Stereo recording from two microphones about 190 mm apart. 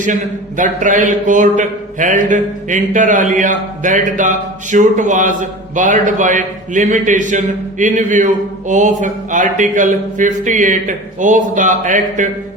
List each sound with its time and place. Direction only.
0.0 s speech: 45° right (ahead or behind)